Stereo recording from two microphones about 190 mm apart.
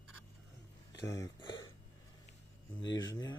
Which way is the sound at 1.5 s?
80° left.